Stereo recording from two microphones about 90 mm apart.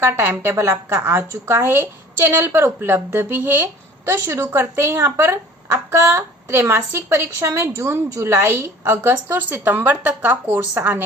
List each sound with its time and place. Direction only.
0.0 s a woman's voice: 25° right (ahead or behind)